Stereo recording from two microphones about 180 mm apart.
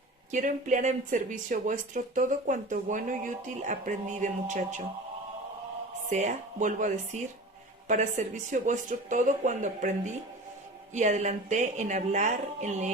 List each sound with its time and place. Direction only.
0.3 s speech: 45° right (ahead or behind)
6.1 s speech: 40° right (ahead or behind)